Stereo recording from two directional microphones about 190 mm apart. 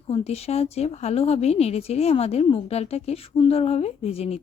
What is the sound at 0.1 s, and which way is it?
Speech, 35° left (ahead or behind).